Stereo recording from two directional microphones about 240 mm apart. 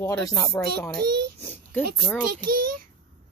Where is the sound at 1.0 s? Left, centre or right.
Right.